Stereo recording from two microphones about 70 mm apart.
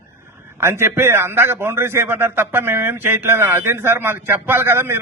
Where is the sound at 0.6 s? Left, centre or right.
Right.